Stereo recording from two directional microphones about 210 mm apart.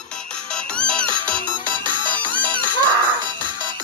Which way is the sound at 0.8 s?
5° left (ahead or behind).